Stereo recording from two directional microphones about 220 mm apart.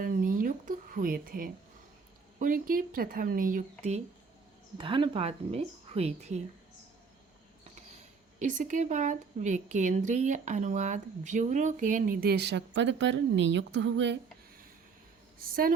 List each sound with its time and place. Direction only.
0.0 s a sound: 40° right (ahead or behind)
2.4 s speech: 40° right (ahead or behind)
4.8 s a woman's voice: 25° right (ahead or behind)
8.4 s speech: 35° right (ahead or behind); by 14.2 s 55° right (ahead or behind)